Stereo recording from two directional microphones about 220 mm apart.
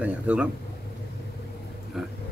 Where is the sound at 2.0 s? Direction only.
Centre (ahead or behind).